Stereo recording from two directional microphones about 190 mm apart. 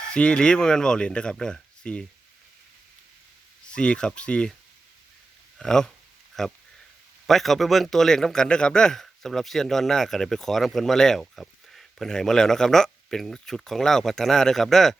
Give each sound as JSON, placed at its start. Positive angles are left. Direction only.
{"t": 0.1, "sound": "speech", "side_deg": 5}
{"t": 3.7, "sound": "speech", "side_deg": 5}
{"t": 5.5, "sound": "speech", "side_deg": 5}